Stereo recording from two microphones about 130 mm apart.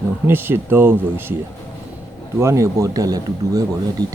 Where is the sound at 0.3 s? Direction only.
15° right (ahead or behind).